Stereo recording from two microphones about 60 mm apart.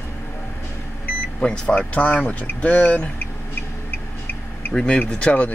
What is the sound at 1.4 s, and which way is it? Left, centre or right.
Speech, centre.